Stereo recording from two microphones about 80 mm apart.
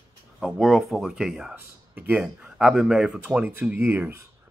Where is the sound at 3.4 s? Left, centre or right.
Right.